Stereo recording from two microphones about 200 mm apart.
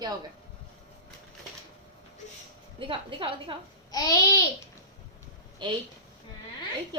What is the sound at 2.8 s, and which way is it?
Speech, 25° right (ahead or behind).